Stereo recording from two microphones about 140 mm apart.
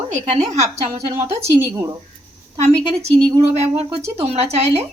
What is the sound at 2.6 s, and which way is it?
Speech, 50° right (ahead or behind).